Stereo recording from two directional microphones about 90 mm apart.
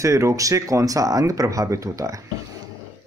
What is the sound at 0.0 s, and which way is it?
A man's voice, 35° right (ahead or behind).